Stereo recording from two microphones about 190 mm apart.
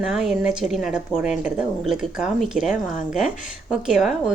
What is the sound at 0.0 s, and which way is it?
A woman's voice, centre (ahead or behind).